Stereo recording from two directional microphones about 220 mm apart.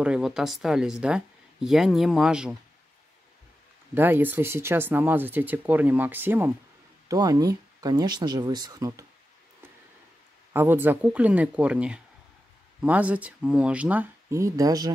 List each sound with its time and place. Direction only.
0.0 s speech: 5° right (ahead or behind)
3.9 s speech: 10° right (ahead or behind)
10.5 s speech: 10° right (ahead or behind)